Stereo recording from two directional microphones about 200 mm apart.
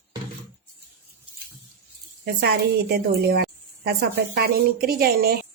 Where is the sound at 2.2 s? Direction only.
55° right (ahead or behind).